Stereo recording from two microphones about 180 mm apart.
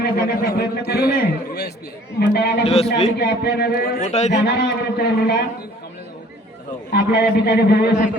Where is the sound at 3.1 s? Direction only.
65° left (ahead or behind).